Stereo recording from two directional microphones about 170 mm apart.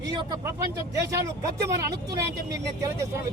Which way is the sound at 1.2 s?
20° right (ahead or behind).